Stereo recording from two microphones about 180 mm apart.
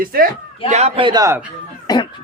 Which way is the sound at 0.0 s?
55° right (ahead or behind).